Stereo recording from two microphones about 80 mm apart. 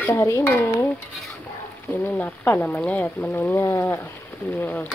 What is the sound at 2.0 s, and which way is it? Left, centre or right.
Speech, centre.